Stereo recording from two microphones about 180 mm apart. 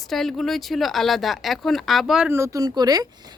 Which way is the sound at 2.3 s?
15° right (ahead or behind).